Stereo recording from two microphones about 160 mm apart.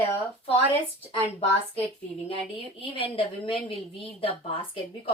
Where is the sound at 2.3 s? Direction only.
35° left (ahead or behind).